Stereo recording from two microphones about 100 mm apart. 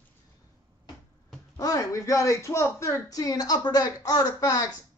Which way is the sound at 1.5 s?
35° left (ahead or behind).